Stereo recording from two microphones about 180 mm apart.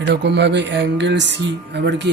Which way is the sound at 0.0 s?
70° right (ahead or behind).